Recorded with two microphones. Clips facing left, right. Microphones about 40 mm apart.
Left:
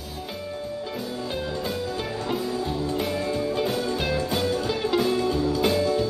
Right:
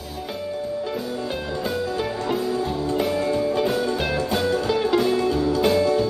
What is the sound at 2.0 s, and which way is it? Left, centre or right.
Music, centre.